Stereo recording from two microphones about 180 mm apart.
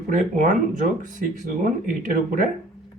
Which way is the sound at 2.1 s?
45° right (ahead or behind).